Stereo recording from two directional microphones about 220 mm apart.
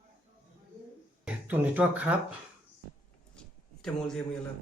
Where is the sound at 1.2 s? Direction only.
5° right (ahead or behind).